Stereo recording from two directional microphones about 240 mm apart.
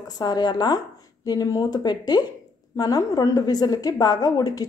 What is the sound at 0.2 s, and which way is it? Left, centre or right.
A woman's voice, centre.